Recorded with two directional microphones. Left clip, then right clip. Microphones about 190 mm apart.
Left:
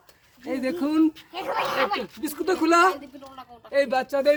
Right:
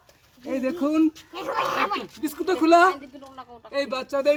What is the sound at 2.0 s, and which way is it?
Speech, 10° left (ahead or behind).